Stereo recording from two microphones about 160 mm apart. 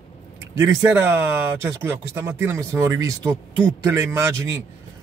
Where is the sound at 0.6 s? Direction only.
15° right (ahead or behind).